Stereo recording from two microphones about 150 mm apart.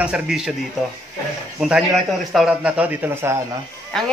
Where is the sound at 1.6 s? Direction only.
5° right (ahead or behind).